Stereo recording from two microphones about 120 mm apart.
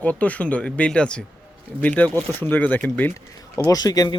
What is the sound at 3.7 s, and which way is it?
Speech, 30° left (ahead or behind).